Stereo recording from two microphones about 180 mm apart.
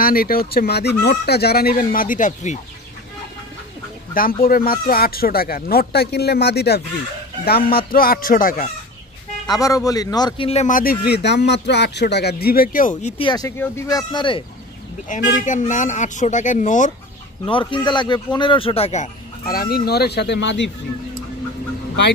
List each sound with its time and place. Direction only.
0.0 s speech: 55° left (ahead or behind)
4.4 s speech: 55° left (ahead or behind)
9.5 s speech: 20° left (ahead or behind); by 11.0 s 50° left (ahead or behind)
11.1 s speech: 70° left (ahead or behind); by 12.9 s 50° left (ahead or behind)
13.0 s speech: 25° left (ahead or behind)
15.0 s speech: 45° left (ahead or behind)
17.5 s speech: 25° left (ahead or behind)
19.4 s speech: 55° left (ahead or behind); by 20.7 s 75° left (ahead or behind)